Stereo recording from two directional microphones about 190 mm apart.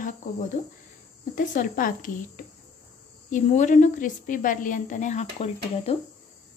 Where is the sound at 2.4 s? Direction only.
45° left (ahead or behind).